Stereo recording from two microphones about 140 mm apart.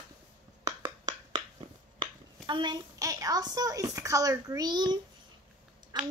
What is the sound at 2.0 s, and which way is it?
A child's voice, 35° right (ahead or behind).